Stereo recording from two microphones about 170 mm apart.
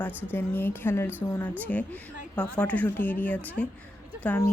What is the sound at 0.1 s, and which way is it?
Speech, 10° right (ahead or behind).